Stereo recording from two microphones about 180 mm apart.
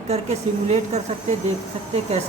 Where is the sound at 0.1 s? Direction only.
35° right (ahead or behind).